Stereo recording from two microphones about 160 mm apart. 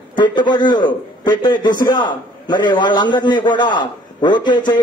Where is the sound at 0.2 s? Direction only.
30° left (ahead or behind).